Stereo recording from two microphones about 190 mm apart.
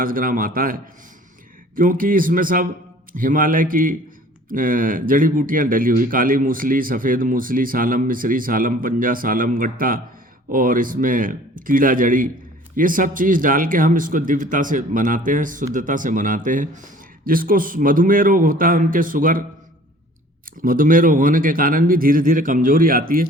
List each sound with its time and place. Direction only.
0.0 s speech: 45° right (ahead or behind)
20.6 s speech: 45° right (ahead or behind)